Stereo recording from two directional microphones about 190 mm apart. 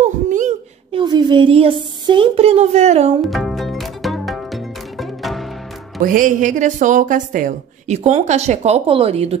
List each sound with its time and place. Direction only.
0.0 s a sound: 40° right (ahead or behind)
0.9 s a woman's voice: 25° right (ahead or behind)
3.3 s music: centre (ahead or behind)
6.0 s a woman's voice: 45° right (ahead or behind)